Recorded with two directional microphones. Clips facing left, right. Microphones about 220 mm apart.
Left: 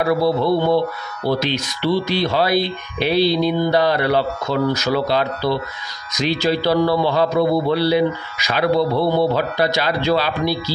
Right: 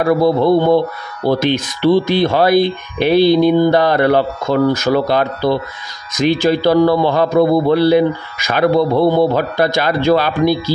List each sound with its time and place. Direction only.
0.0 s a man's voice: 50° right (ahead or behind)